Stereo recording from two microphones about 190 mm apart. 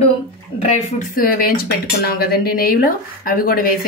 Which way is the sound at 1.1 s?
50° left (ahead or behind).